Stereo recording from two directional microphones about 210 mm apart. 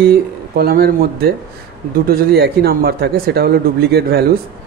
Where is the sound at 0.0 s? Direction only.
45° right (ahead or behind).